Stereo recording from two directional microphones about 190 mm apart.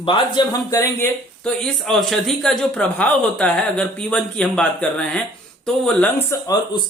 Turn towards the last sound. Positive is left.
turn(degrees=10)  # may be behind; listen again after turning